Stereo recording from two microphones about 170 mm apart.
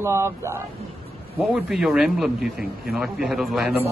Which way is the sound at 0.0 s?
15° right (ahead or behind).